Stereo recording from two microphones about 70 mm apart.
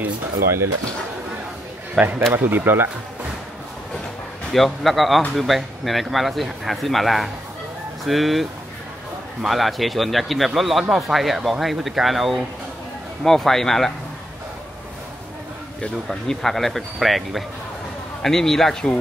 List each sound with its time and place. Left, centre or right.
2.0 s speech: right
4.5 s speech: centre
16.1 s a man's voice: centre